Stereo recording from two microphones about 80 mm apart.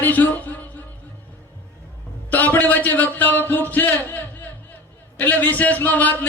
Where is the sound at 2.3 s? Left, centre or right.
Left.